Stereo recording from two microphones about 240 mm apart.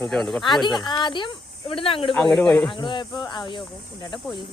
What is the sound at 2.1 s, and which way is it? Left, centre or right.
Speech, centre.